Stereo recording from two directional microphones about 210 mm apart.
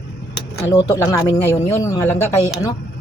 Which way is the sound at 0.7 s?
15° left (ahead or behind).